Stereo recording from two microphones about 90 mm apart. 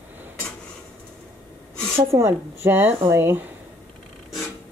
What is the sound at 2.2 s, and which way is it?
A woman's voice, 25° right (ahead or behind).